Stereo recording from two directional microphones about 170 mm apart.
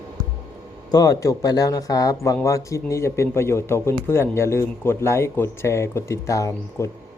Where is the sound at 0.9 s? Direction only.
20° left (ahead or behind).